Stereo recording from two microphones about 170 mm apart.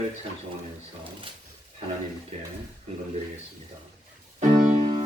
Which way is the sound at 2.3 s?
40° right (ahead or behind).